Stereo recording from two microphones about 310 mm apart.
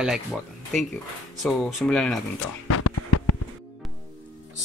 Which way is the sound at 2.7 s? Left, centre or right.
Left.